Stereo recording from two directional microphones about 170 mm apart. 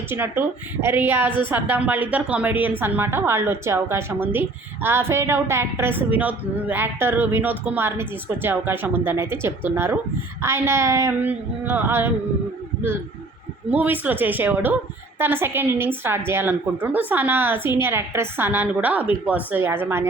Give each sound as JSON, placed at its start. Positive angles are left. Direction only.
{"t": 0.1, "sound": "a woman's voice", "side_deg": -10}
{"t": 13.7, "sound": "a woman's voice", "side_deg": -10}